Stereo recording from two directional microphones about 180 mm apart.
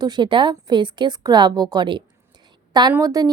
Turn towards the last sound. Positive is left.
turn(degrees=-20)  # may be behind; listen again after turning